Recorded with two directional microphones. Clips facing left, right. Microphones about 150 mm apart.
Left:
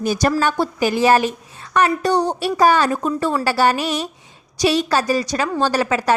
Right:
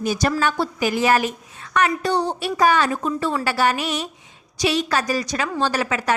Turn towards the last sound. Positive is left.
turn(degrees=35)  # may be behind; listen again after turning